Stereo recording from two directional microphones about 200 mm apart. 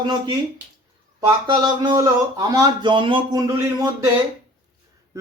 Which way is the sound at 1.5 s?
20° right (ahead or behind).